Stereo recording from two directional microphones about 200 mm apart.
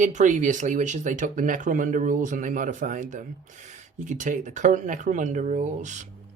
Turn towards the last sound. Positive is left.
turn(degrees=-35)  # may be behind; listen again after turning